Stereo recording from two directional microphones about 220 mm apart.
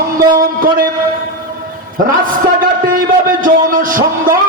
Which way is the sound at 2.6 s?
40° right (ahead or behind).